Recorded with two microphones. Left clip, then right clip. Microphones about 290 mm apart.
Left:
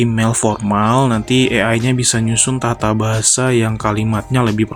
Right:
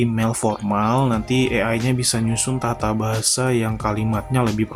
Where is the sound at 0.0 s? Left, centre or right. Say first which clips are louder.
Left 5 dB; right.